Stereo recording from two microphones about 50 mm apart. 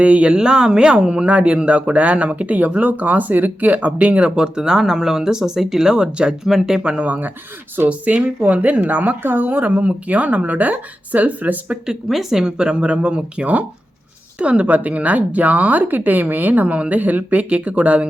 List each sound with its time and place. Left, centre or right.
0.0 s speech: right
9.2 s speech: right
11.9 s speech: centre; by 18.1 s right